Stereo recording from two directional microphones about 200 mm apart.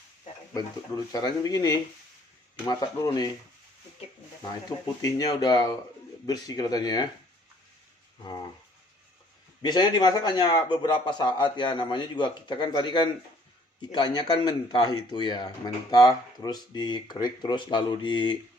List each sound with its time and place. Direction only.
1.1 s speech: 20° left (ahead or behind)
5.0 s speech: 20° left (ahead or behind)
9.6 s speech: 20° left (ahead or behind)